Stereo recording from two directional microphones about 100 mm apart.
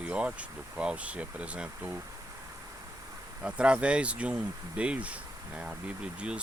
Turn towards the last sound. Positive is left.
turn(degrees=-10)  # may be behind; listen again after turning